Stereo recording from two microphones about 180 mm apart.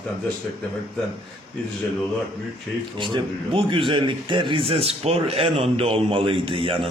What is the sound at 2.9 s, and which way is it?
A man's voice, 25° right (ahead or behind).